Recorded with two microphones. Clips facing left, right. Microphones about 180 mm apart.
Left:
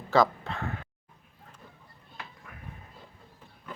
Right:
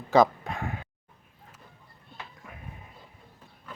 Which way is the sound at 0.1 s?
15° right (ahead or behind).